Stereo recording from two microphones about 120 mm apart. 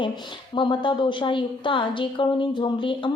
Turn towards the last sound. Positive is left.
turn(degrees=45)  # may be behind; listen again after turning